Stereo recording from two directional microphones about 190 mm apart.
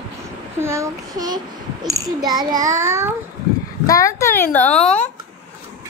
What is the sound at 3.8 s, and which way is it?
Speech, 15° left (ahead or behind).